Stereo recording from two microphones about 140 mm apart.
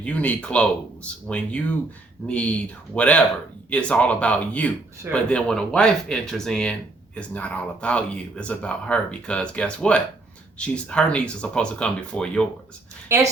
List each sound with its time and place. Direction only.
0.0 s speech: 10° left (ahead or behind)
13.1 s a woman's voice: 20° right (ahead or behind)